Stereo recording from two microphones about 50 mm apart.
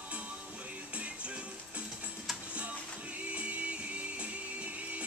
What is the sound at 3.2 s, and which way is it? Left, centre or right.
Music, right.